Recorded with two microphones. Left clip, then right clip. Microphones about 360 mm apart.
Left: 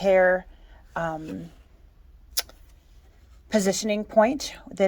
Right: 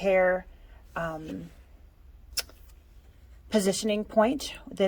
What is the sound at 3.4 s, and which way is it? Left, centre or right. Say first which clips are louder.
A woman's voice: left 2 dB; centre.